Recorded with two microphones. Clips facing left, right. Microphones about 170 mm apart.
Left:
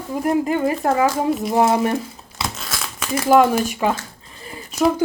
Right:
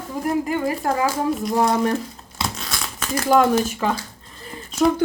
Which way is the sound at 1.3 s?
Centre (ahead or behind).